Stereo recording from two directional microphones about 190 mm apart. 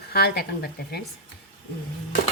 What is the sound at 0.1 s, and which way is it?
Speech, 55° left (ahead or behind).